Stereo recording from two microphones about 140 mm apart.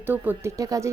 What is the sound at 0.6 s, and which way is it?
Speech, 25° right (ahead or behind).